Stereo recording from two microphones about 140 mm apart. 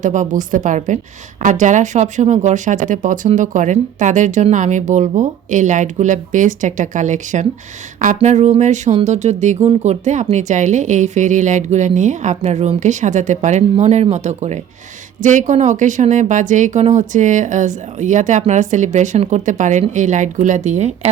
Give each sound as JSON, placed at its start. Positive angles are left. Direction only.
{"t": 0.0, "sound": "a woman's voice", "side_deg": -65}